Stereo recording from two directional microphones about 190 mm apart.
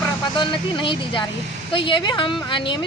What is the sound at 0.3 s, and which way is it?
Speech, 25° left (ahead or behind).